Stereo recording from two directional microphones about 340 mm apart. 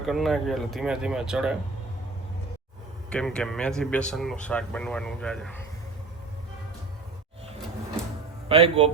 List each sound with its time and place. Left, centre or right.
0.0 s speech: centre
3.1 s speech: centre
8.4 s speech: centre